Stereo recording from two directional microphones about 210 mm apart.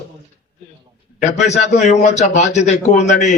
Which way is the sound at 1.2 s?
35° left (ahead or behind).